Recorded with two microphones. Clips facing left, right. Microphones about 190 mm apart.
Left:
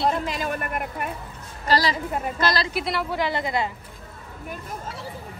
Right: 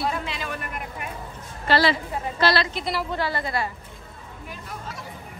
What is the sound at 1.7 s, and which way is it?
Speech, 40° left (ahead or behind).